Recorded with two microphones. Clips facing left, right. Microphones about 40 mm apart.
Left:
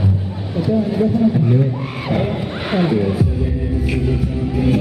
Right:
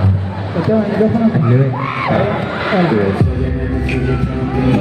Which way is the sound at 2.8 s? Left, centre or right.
Right.